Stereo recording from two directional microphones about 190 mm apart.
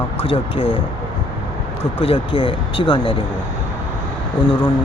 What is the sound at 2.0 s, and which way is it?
Speech, 30° left (ahead or behind).